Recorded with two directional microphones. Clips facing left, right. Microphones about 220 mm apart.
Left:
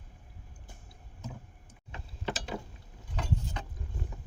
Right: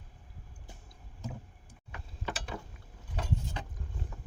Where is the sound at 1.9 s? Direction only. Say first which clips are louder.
Left 3 dB; 25° left (ahead or behind).